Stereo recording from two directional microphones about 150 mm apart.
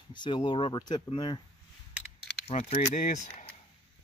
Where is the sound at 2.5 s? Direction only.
50° left (ahead or behind).